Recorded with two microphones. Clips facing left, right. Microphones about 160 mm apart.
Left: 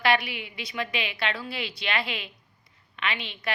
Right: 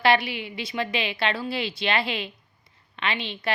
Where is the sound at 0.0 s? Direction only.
30° right (ahead or behind).